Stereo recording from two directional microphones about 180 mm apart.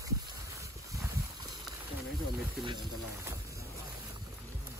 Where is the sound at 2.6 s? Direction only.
20° right (ahead or behind).